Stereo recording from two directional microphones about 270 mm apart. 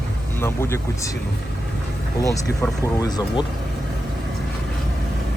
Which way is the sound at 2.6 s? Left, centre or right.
Centre.